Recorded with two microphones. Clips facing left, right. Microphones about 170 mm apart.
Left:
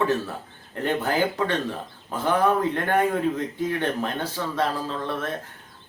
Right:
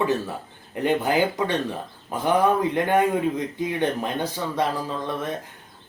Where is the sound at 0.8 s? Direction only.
15° right (ahead or behind).